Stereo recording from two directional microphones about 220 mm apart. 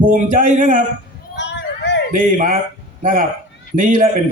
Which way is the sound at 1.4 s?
55° left (ahead or behind).